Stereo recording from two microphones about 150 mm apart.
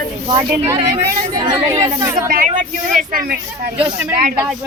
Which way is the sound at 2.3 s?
65° right (ahead or behind).